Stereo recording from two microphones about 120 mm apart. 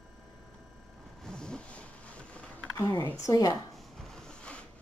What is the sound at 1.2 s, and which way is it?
Vehicle, 5° left (ahead or behind).